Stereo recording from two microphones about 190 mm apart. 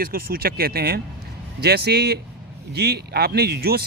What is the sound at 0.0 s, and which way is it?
A man's voice, 50° right (ahead or behind).